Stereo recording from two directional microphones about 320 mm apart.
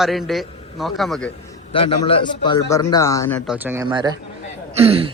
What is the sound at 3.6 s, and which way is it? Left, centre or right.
Speech, centre.